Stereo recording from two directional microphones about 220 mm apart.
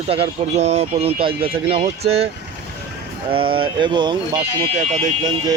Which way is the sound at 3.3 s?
25° right (ahead or behind).